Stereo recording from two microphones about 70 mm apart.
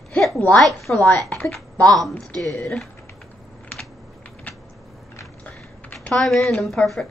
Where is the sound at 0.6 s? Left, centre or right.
Centre.